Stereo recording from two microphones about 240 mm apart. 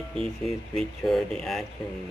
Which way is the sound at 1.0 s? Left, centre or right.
Centre.